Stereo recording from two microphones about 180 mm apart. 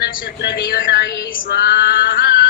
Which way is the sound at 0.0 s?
50° left (ahead or behind).